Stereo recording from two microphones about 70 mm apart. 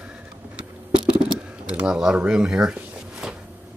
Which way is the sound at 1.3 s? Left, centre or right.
Centre.